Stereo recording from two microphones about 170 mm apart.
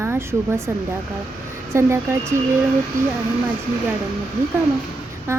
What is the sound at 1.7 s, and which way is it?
Speech, 15° right (ahead or behind).